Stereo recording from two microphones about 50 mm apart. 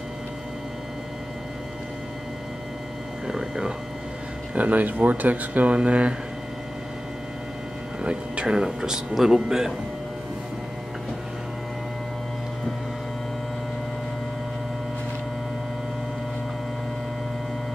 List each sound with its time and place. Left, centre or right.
3.3 s speech: centre
4.6 s speech: right
8.0 s speech: centre